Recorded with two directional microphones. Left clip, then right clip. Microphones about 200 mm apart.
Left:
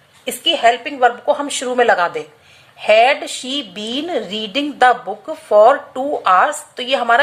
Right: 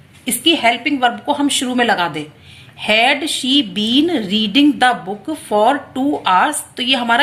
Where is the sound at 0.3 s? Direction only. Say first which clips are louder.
Even; 45° left (ahead or behind).